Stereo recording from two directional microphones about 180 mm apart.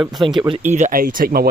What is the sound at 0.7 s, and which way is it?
Speech, 45° right (ahead or behind).